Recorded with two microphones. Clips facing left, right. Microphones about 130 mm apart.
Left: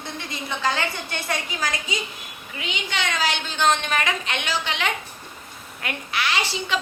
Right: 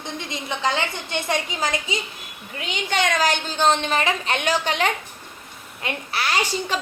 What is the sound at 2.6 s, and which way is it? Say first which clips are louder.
A woman's voice: right 5 dB; 45° right (ahead or behind).